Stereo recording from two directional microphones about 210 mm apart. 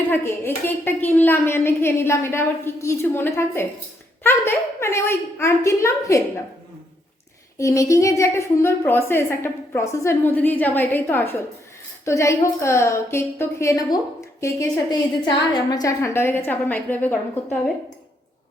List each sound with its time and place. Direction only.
0.1 s a woman's voice: 10° left (ahead or behind)
7.6 s a woman's voice: 15° left (ahead or behind)